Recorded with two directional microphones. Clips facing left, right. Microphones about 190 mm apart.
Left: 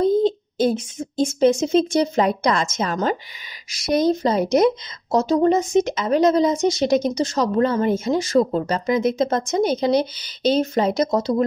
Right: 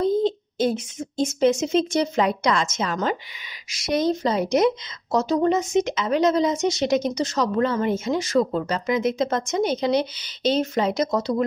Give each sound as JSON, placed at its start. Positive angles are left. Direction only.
{"t": 0.0, "sound": "speech", "side_deg": 35}